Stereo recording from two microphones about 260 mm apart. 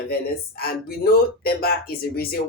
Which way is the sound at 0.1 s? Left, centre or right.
Left.